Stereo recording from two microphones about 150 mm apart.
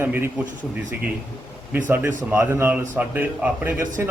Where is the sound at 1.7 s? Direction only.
10° right (ahead or behind).